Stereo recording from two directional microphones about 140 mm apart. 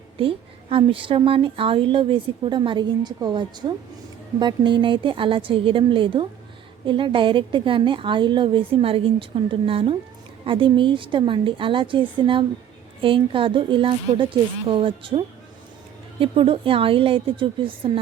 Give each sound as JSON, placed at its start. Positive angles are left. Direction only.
{"t": 0.2, "sound": "a woman's voice", "side_deg": -40}
{"t": 16.2, "sound": "a woman's voice", "side_deg": -40}